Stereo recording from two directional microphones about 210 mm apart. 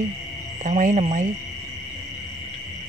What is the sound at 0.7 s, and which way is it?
Frog, 35° right (ahead or behind).